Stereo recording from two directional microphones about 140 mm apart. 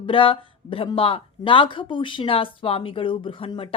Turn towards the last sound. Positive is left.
turn(degrees=40)  # may be behind; listen again after turning